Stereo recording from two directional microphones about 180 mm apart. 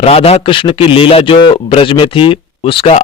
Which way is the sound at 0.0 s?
30° left (ahead or behind).